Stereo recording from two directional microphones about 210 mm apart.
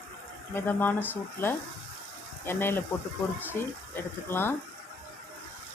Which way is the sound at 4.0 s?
10° left (ahead or behind).